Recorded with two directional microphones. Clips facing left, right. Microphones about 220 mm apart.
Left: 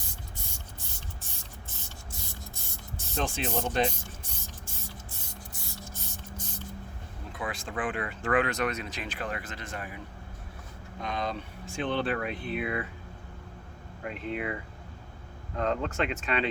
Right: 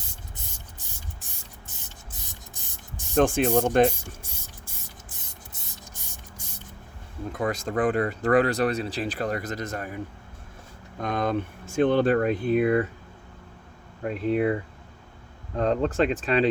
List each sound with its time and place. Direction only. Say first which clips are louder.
2.2 s spray: left 2 dB; 15° right (ahead or behind)
3.2 s speech: right 10 dB; 50° right (ahead or behind)
5.5 s spray: left 3 dB; 20° right (ahead or behind)
7.3 s speech: right 9 dB; 40° right (ahead or behind)
11.0 s speech: right 8 dB; 50° right (ahead or behind)
14.0 s speech: right 10 dB; 40° right (ahead or behind)